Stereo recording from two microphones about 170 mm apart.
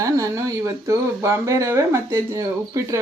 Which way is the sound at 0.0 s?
20° right (ahead or behind).